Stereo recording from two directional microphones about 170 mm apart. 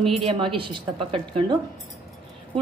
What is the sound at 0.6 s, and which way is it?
A woman's voice, 30° right (ahead or behind).